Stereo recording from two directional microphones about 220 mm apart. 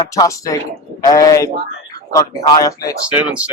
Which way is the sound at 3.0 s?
5° right (ahead or behind).